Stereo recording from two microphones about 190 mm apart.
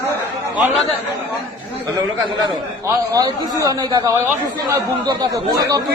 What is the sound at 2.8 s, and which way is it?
A man's voice, 20° right (ahead or behind).